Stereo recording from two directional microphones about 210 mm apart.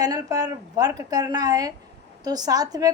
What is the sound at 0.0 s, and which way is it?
A woman's voice, 15° right (ahead or behind).